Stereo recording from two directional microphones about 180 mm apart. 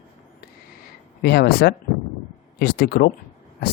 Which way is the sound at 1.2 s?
60° left (ahead or behind).